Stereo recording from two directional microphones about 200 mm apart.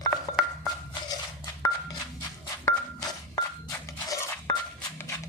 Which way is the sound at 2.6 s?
15° left (ahead or behind).